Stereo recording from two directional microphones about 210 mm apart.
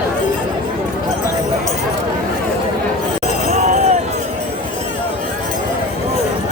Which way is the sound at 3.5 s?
35° right (ahead or behind).